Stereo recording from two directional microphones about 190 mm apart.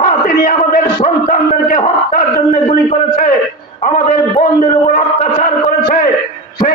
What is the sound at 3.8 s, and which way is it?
A man's voice, 45° left (ahead or behind).